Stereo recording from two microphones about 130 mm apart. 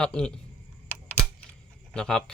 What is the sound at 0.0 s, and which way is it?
Speech, 5° left (ahead or behind).